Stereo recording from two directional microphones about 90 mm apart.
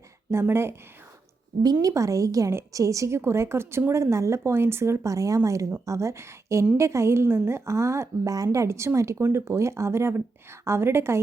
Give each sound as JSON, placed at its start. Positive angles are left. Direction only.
{"t": 0.3, "sound": "a woman's voice", "side_deg": -30}
{"t": 1.8, "sound": "a woman's voice", "side_deg": -35}